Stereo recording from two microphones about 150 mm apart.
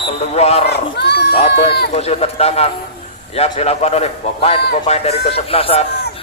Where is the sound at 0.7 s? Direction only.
90° left.